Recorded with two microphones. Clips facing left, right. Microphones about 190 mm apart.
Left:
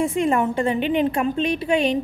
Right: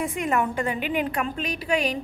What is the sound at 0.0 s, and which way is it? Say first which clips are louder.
A woman's voice: left 5 dB; 25° left (ahead or behind).